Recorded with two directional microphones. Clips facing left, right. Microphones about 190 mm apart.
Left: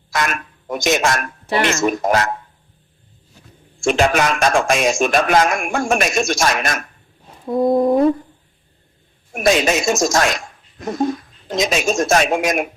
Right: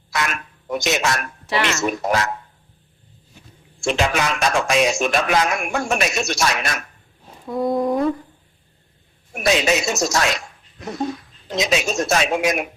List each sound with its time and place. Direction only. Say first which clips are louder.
0.1 s speech: left 3 dB; 50° left (ahead or behind)
3.8 s a man's voice: left 5 dB; 50° left (ahead or behind)
7.4 s a sound: left 5 dB; 25° left (ahead or behind)
9.3 s speech: left 3 dB; 50° left (ahead or behind)